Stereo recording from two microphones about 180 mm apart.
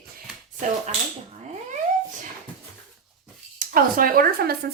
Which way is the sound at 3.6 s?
50° right (ahead or behind).